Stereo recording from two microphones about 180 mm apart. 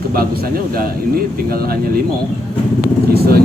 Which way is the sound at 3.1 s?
60° right (ahead or behind).